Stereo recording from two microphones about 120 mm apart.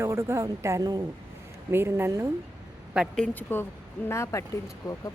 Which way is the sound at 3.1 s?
10° left (ahead or behind).